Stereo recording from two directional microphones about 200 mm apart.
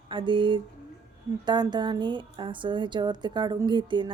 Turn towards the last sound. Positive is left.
turn(degrees=-25)  # may be behind; listen again after turning